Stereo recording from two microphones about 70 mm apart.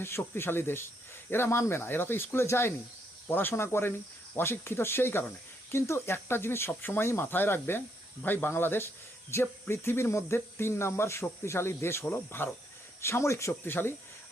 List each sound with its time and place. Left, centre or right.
0.0 s speech: left